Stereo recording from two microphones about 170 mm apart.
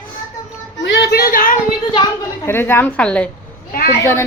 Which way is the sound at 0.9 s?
85° left.